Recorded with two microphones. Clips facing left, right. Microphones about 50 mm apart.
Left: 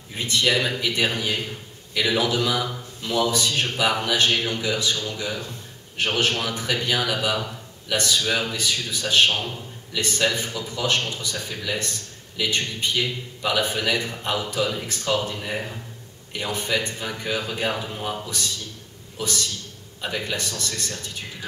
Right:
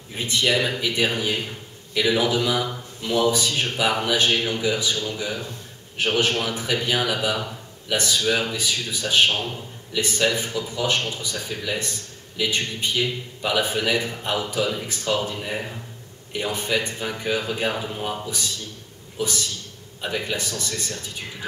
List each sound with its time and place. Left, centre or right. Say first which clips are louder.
0.2 s speech: even; centre
15.3 s speech: even; centre